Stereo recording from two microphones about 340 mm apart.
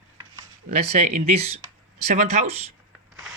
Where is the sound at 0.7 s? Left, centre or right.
Centre.